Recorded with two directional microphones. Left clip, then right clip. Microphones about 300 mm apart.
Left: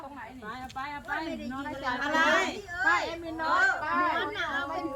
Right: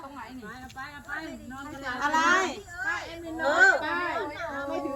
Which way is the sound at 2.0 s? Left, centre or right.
Centre.